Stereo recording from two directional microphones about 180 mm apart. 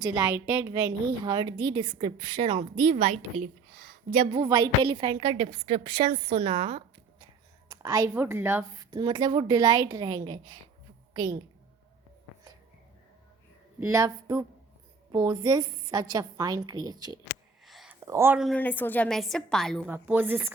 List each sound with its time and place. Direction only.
0.0 s a woman's voice: 15° right (ahead or behind); by 4.3 s 45° right (ahead or behind)
4.3 s a woman's voice: 25° right (ahead or behind)
7.7 s a woman's voice: 15° right (ahead or behind)
13.7 s a woman's voice: 15° right (ahead or behind)
17.7 s a sound: centre (ahead or behind)
18.0 s speech: 15° right (ahead or behind)
18.3 s a woman's voice: 5° left (ahead or behind)
19.9 s a woman's voice: 10° right (ahead or behind)